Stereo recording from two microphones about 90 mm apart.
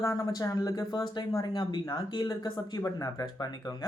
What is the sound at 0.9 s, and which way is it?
Speech, 55° left (ahead or behind).